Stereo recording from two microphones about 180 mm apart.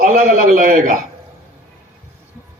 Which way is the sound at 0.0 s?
50° right (ahead or behind).